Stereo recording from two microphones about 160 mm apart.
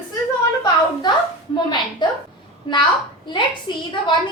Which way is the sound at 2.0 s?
25° left (ahead or behind).